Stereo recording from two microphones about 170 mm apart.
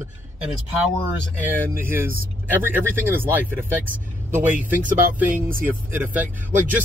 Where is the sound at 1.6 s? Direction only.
15° right (ahead or behind).